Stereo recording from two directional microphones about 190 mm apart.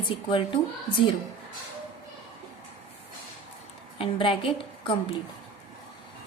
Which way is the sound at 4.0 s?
25° left (ahead or behind).